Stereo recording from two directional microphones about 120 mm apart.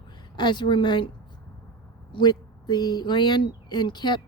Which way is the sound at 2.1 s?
35° left (ahead or behind).